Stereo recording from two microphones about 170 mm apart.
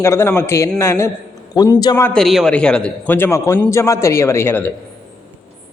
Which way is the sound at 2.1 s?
Centre (ahead or behind).